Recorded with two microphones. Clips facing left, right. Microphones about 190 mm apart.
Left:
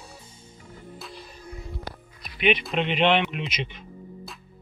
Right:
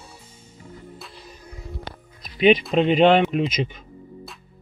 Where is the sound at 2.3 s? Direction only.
35° right (ahead or behind).